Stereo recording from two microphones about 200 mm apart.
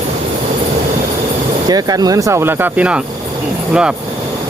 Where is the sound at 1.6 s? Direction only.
20° right (ahead or behind).